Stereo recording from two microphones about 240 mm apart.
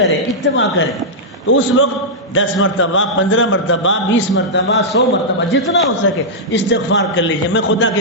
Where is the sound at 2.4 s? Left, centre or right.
Left.